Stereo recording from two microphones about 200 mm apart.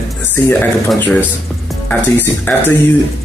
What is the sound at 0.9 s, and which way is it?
Speech, 10° left (ahead or behind).